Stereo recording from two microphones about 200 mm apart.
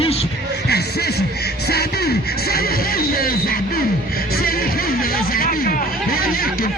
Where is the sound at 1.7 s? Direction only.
50° left (ahead or behind).